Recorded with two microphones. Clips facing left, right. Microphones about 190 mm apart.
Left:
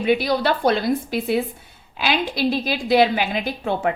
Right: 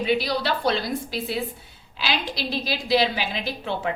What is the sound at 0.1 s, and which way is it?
A woman's voice, 50° left (ahead or behind).